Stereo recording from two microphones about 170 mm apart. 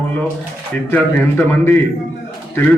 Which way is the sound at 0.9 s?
15° left (ahead or behind).